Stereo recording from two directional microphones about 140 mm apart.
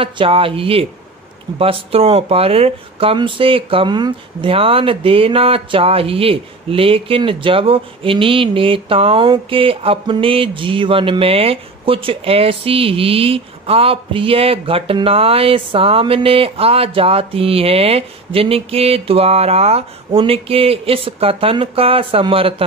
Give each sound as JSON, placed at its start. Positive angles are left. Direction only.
{"t": 0.0, "sound": "speech", "side_deg": -40}